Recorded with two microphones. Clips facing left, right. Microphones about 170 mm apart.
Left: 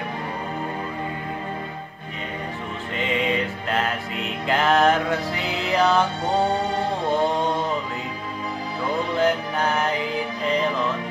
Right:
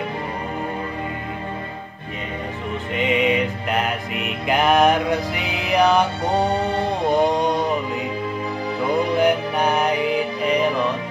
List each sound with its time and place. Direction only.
3.0 s music: 15° right (ahead or behind)
9.1 s music: 15° right (ahead or behind)